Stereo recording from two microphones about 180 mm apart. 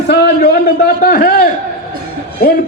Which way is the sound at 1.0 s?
45° left (ahead or behind).